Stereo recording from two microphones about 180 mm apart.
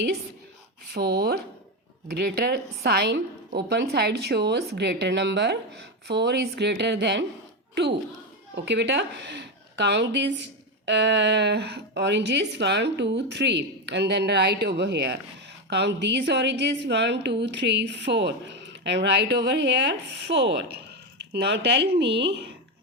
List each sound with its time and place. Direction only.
0.9 s a woman's voice: 65° right (ahead or behind)
8.5 s a woman's voice: 75° right (ahead or behind)